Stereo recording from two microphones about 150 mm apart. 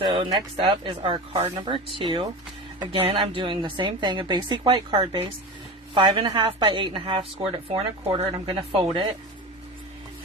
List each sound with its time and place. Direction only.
0.0 s a woman's voice: 35° right (ahead or behind)